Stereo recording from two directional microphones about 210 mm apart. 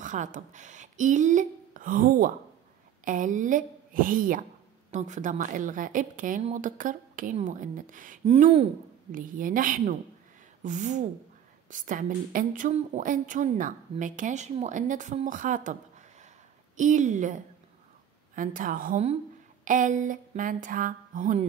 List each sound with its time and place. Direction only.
0.0 s speech: 35° right (ahead or behind)